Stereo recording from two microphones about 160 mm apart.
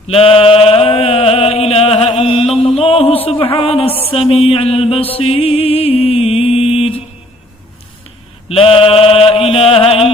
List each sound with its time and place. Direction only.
0.1 s a sound: 35° left (ahead or behind)
3.2 s music: 35° left (ahead or behind)
8.4 s mantra: 35° left (ahead or behind)